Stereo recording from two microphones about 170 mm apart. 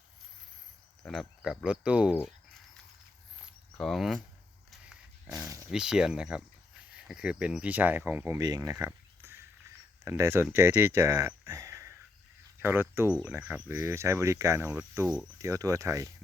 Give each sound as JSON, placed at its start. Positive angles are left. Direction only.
{"t": 1.0, "sound": "speech", "side_deg": 0}
{"t": 3.8, "sound": "speech", "side_deg": 0}
{"t": 4.7, "sound": "a sound", "side_deg": 0}
{"t": 5.7, "sound": "speech", "side_deg": -5}
{"t": 9.2, "sound": "a sound", "side_deg": -15}
{"t": 10.0, "sound": "speech", "side_deg": -15}